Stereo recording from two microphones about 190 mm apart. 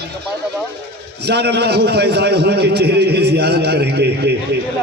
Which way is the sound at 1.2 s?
60° right (ahead or behind).